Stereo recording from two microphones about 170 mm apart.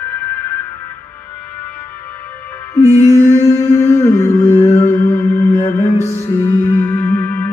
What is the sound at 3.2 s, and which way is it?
Humming, 15° left (ahead or behind).